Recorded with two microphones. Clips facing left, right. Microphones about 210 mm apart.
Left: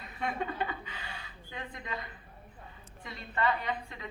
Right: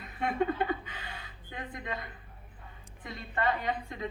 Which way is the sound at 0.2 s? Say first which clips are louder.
Right 5 dB; 50° right (ahead or behind).